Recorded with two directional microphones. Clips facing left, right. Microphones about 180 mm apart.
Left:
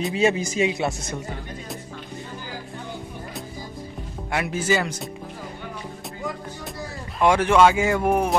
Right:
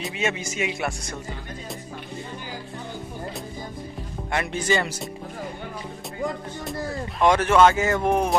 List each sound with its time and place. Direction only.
0.1 s speech: 35° left (ahead or behind)
4.3 s speech: 5° left (ahead or behind)
7.2 s speech: 10° left (ahead or behind)